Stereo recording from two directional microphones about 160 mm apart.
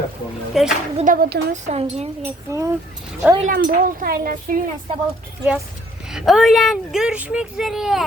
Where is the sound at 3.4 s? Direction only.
65° right (ahead or behind).